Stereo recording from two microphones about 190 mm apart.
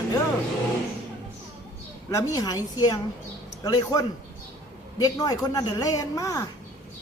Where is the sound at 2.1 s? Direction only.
20° left (ahead or behind).